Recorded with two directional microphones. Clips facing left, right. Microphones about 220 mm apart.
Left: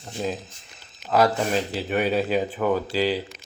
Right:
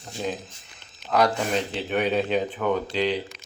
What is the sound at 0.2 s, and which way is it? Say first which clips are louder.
Speech: left 1 dB; 5° left (ahead or behind).